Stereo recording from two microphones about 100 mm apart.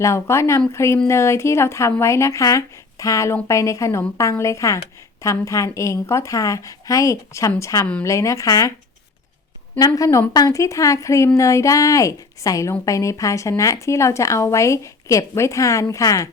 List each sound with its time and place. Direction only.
0.0 s speech: 30° left (ahead or behind)
9.7 s speech: 35° left (ahead or behind)